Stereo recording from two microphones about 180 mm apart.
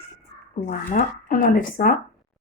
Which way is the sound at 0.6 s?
50° left (ahead or behind).